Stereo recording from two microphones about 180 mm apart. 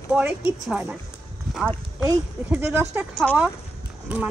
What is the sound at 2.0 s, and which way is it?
Speech, 15° right (ahead or behind).